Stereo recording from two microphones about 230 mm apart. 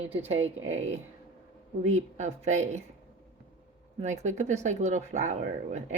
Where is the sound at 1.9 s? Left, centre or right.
Right.